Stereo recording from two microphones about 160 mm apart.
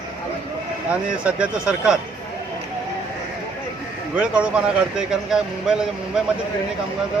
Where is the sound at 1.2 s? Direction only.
5° right (ahead or behind).